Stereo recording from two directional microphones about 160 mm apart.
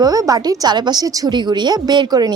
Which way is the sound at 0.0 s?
25° right (ahead or behind).